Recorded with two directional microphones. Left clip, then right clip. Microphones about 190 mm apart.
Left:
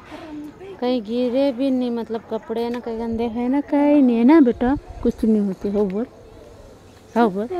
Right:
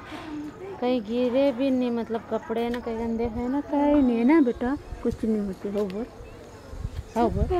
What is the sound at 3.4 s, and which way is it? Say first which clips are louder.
Speech: left 7 dB; 60° left (ahead or behind).